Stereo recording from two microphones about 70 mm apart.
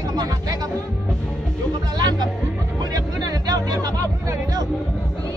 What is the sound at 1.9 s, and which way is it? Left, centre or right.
Music, right.